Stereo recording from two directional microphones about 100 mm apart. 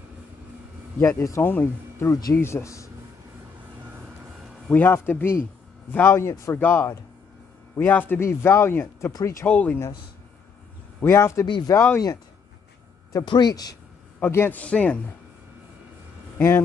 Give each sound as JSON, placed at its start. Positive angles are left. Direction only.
{"t": 0.9, "sound": "speech", "side_deg": 30}
{"t": 4.7, "sound": "speech", "side_deg": 20}
{"t": 6.6, "sound": "a man's voice", "side_deg": 15}
{"t": 9.5, "sound": "a man's voice", "side_deg": 15}
{"t": 11.0, "sound": "speech", "side_deg": 25}
{"t": 11.4, "sound": "speech", "side_deg": 55}
{"t": 11.7, "sound": "speech", "side_deg": 25}
{"t": 13.1, "sound": "a man's voice", "side_deg": 45}
{"t": 14.2, "sound": "a man's voice", "side_deg": 20}
{"t": 16.3, "sound": "speech", "side_deg": 20}